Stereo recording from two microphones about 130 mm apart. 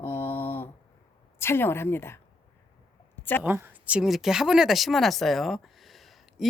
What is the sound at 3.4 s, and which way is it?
Speech, 15° right (ahead or behind).